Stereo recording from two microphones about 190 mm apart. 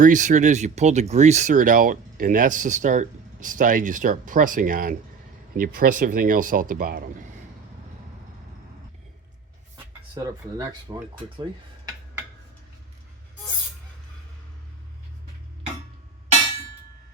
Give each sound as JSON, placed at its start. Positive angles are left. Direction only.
{"t": 0.0, "sound": "speech", "side_deg": -40}
{"t": 9.7, "sound": "speech", "side_deg": -20}